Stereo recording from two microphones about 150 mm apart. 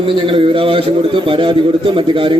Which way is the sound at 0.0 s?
35° right (ahead or behind).